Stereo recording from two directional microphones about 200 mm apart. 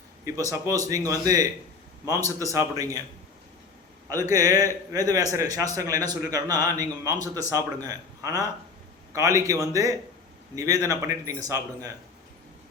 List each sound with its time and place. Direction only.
0.3 s speech: 15° right (ahead or behind)
4.2 s speech: 15° right (ahead or behind)